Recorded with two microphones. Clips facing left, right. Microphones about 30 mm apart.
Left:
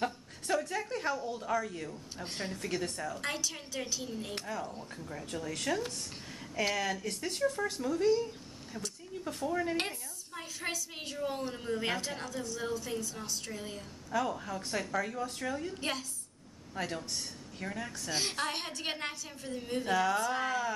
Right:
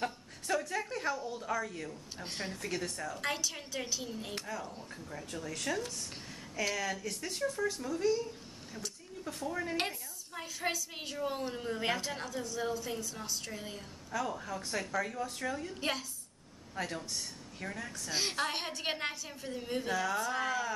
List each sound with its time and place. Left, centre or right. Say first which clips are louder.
0.0 s a sound: left 2 dB; centre
1.9 s a woman's voice: left 1 dB; centre
4.4 s speech: left 2 dB; centre
4.7 s a woman's voice: left 2 dB; centre
5.5 s speech: left 2 dB; left
7.4 s a woman's voice: left 2 dB; left; by 19.9 s centre
19.9 s speech: left 4 dB; centre